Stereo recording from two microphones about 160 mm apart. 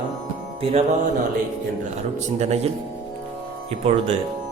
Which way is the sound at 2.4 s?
45° right (ahead or behind).